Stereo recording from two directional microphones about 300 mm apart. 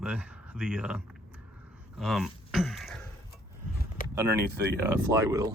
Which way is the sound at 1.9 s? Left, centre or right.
Centre.